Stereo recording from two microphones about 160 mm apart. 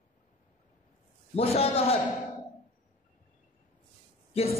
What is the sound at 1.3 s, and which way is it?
Speech, 40° left (ahead or behind).